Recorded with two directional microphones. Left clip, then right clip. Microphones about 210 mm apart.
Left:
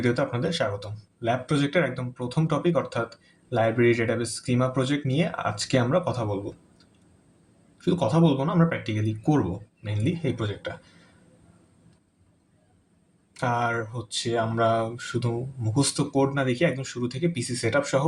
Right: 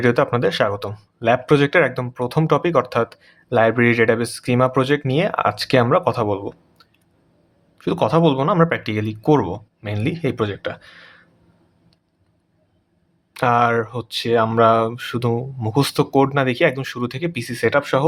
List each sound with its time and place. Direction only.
0.0 s speech: 40° right (ahead or behind)
7.8 s speech: 40° right (ahead or behind)
13.3 s speech: 35° right (ahead or behind)